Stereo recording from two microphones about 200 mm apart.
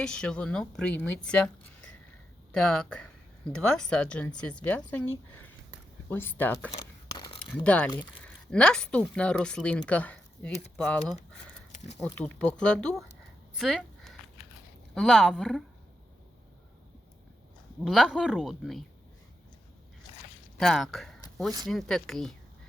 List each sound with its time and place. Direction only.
0.0 s speech: 5° left (ahead or behind)
2.5 s speech: 5° left (ahead or behind)
7.2 s a sound: 25° left (ahead or behind)
7.5 s speech: 5° left (ahead or behind)
13.6 s a sound: centre (ahead or behind)
14.9 s speech: centre (ahead or behind)
17.8 s speech: centre (ahead or behind)
20.6 s speech: centre (ahead or behind)